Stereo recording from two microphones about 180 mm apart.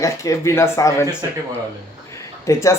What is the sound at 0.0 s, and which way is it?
Speech, 15° left (ahead or behind).